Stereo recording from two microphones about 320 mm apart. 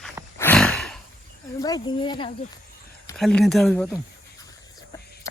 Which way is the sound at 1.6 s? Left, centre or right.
Centre.